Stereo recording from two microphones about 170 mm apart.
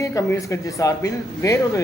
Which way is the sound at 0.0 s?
20° left (ahead or behind).